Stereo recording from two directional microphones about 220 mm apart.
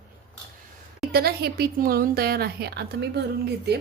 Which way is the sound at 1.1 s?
45° right (ahead or behind).